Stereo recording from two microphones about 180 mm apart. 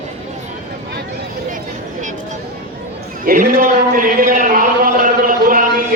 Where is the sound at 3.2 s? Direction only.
50° right (ahead or behind).